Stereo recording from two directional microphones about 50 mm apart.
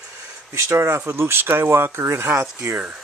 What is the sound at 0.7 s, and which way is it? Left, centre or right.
Speech, right.